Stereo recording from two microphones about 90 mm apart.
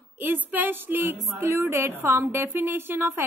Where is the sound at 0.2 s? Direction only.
20° right (ahead or behind).